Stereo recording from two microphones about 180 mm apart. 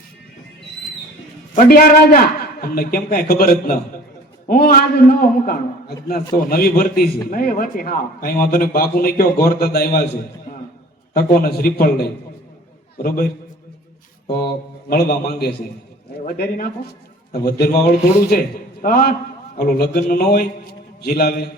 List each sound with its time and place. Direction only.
1.5 s a man's voice: 50° left (ahead or behind)
11.1 s a man's voice: 55° left (ahead or behind)
14.3 s a man's voice: 60° left (ahead or behind)